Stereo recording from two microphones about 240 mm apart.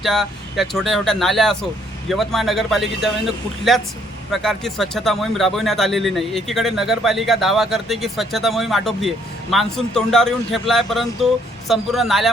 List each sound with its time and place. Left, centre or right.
0.0 s speech: centre